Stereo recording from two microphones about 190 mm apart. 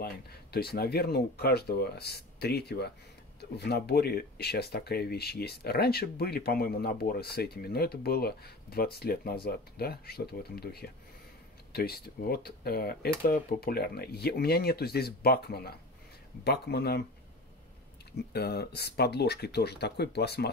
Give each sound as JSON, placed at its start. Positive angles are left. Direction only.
{"t": 0.0, "sound": "speech", "side_deg": 55}
{"t": 18.3, "sound": "speech", "side_deg": 55}